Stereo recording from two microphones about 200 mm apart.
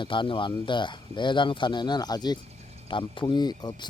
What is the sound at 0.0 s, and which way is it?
Speech, 25° left (ahead or behind).